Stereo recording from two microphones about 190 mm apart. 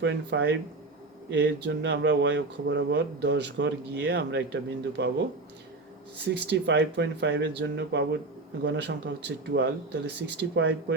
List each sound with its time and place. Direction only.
0.0 s speech: 65° right (ahead or behind)
6.5 s speech: 65° right (ahead or behind)